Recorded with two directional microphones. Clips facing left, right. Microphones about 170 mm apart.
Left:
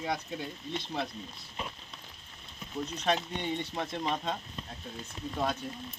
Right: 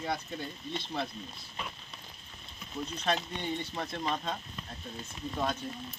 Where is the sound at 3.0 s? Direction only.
15° left (ahead or behind).